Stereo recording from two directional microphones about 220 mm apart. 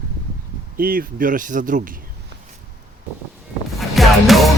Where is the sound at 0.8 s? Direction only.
40° right (ahead or behind).